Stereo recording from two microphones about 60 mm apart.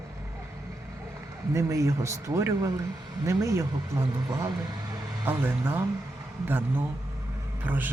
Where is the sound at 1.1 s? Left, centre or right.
Right.